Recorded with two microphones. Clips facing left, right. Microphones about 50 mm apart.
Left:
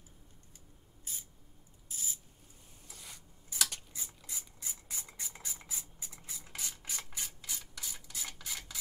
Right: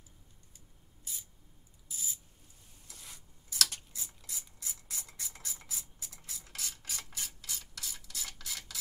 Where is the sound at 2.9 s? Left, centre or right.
Centre.